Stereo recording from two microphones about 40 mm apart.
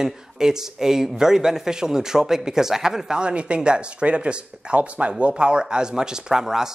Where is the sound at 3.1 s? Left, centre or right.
Right.